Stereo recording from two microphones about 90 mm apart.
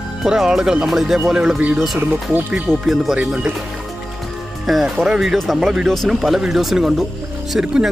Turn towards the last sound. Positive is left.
turn(degrees=-5)  # may be behind; listen again after turning